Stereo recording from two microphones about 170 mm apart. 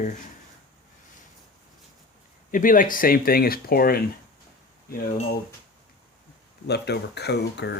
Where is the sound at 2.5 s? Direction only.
50° left (ahead or behind).